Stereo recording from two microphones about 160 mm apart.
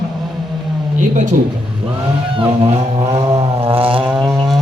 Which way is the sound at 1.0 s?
50° right (ahead or behind).